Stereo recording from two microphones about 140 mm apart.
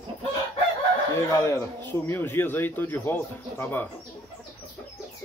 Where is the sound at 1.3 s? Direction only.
20° left (ahead or behind).